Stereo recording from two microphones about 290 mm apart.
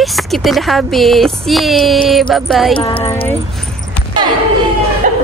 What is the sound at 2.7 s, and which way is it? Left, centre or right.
Speech, centre.